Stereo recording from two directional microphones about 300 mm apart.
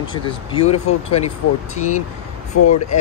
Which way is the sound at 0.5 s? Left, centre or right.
Centre.